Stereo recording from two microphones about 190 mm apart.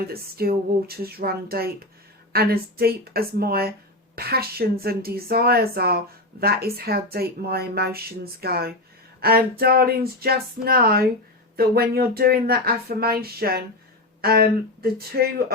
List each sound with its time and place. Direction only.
0.1 s a woman's voice: 55° right (ahead or behind)